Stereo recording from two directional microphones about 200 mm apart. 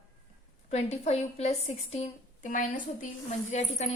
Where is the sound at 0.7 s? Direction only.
35° left (ahead or behind).